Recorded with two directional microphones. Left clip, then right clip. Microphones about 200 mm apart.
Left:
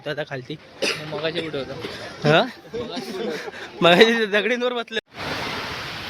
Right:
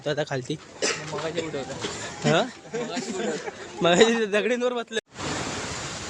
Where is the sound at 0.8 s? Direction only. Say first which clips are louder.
Left 4 dB; 55° left (ahead or behind).